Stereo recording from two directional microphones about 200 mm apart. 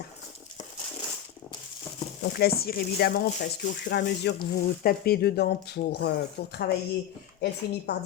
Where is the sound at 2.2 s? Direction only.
50° left (ahead or behind).